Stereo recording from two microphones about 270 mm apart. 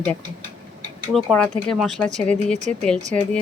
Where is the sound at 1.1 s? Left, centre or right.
Centre.